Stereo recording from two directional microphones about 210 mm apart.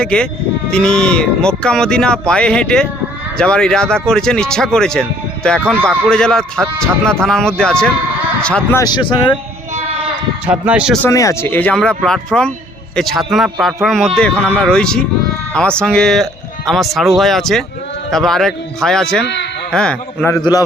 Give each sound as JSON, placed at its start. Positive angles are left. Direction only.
{"t": 0.0, "sound": "speech", "side_deg": 5}
{"t": 8.8, "sound": "speech", "side_deg": 20}
{"t": 10.4, "sound": "speech", "side_deg": -5}
{"t": 11.0, "sound": "speech", "side_deg": 15}